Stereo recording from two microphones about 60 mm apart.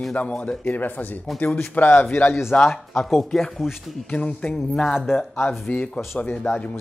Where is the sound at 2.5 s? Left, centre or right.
Centre.